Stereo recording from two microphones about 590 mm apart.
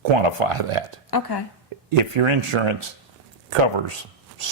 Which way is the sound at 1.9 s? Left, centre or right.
Right.